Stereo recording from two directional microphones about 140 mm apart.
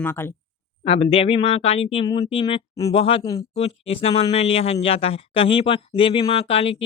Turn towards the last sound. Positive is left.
turn(degrees=45)  # may be behind; listen again after turning